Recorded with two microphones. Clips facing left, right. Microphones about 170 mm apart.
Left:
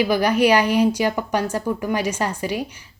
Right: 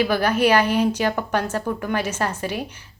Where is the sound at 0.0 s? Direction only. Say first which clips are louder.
Left 2 dB; 15° left (ahead or behind).